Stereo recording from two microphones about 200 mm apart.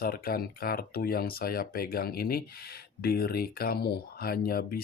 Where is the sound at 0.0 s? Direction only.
45° left (ahead or behind).